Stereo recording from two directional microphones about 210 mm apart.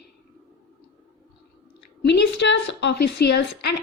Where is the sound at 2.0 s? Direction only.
55° left (ahead or behind).